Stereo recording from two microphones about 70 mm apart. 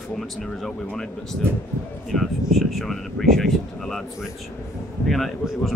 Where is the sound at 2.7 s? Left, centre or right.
Centre.